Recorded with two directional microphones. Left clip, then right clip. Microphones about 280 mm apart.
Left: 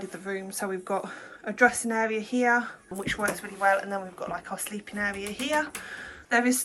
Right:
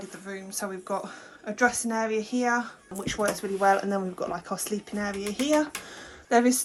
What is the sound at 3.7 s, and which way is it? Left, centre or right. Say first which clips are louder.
Speech: even; right.